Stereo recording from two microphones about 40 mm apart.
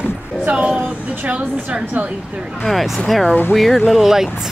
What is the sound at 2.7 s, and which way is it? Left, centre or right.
Speech, centre.